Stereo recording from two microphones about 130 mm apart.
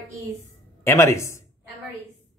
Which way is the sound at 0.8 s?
20° left (ahead or behind).